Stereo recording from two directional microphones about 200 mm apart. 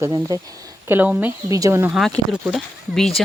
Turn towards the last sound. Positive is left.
turn(degrees=0)  # may be behind; listen again after turning